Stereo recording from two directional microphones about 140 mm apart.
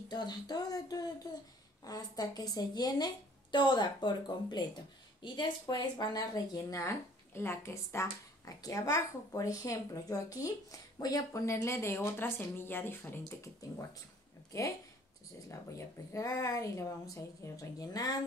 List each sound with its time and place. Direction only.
0.1 s speech: 30° left (ahead or behind)
15.4 s speech: 20° left (ahead or behind)